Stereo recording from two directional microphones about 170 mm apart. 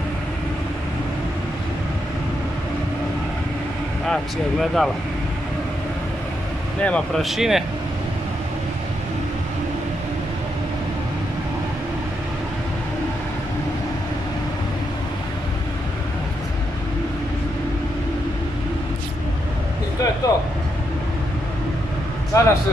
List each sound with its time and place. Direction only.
4.1 s speech: centre (ahead or behind)
6.8 s speech: 5° left (ahead or behind)
20.2 s vehicle: 20° left (ahead or behind)
22.3 s music: 20° left (ahead or behind)